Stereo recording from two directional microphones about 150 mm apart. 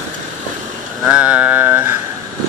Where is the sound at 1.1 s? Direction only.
10° right (ahead or behind).